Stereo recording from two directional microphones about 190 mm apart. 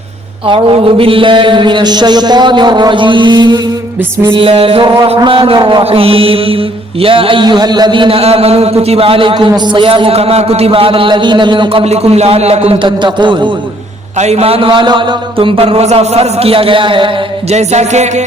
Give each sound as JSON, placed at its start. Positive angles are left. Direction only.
{"t": 0.4, "sound": "music", "side_deg": -25}
{"t": 14.2, "sound": "music", "side_deg": -35}